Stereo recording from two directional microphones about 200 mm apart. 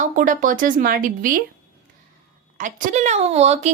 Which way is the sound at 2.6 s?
40° right (ahead or behind).